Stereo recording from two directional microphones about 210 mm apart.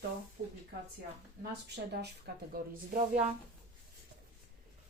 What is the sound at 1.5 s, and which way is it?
Speech, 55° right (ahead or behind).